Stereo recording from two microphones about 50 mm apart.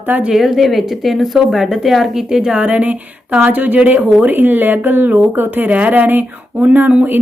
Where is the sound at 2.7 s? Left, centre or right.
Right.